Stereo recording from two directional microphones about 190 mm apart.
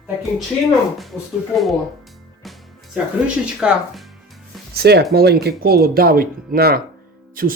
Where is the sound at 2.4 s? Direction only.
5° right (ahead or behind).